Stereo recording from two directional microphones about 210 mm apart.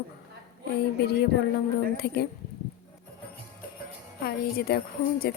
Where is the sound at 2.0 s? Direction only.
50° left (ahead or behind).